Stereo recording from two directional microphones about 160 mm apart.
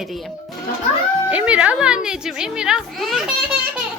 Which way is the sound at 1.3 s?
10° right (ahead or behind).